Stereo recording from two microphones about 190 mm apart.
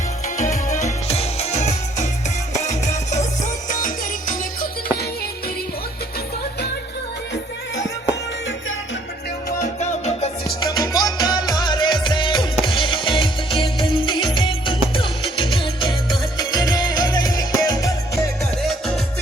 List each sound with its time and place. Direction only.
0.8 s music: 35° left (ahead or behind)
9.6 s music: 35° left (ahead or behind)
10.6 s music: 20° left (ahead or behind)
18.6 s music: centre (ahead or behind)